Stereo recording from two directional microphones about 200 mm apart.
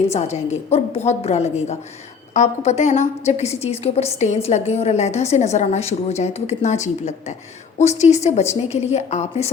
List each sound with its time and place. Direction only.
0.1 s a woman's voice: 35° left (ahead or behind)